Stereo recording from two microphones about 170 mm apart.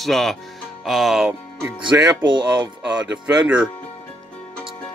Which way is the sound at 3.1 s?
5° right (ahead or behind).